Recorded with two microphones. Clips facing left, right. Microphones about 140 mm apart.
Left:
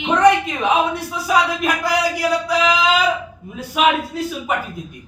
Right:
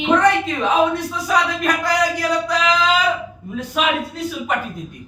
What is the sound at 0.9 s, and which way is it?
A man's voice, 10° left (ahead or behind).